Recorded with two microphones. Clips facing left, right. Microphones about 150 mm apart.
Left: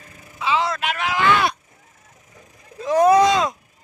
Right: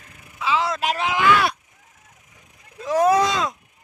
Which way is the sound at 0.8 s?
35° right (ahead or behind).